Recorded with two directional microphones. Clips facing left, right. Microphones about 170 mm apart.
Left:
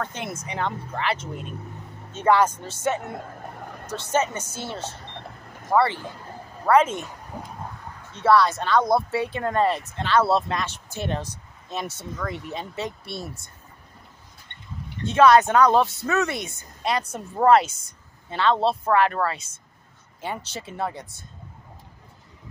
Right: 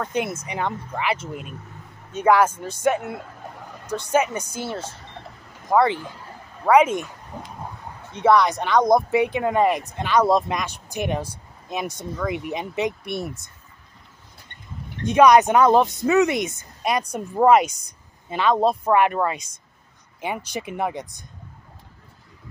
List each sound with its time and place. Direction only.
0.0 s speech: 10° right (ahead or behind)
7.3 s a sound: 10° left (ahead or behind)
8.1 s speech: 15° right (ahead or behind)
15.0 s speech: 15° right (ahead or behind)